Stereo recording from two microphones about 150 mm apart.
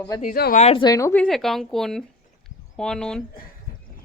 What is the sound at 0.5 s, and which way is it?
Speech, 45° left (ahead or behind).